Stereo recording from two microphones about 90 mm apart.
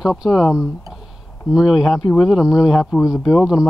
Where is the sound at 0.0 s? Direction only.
5° right (ahead or behind).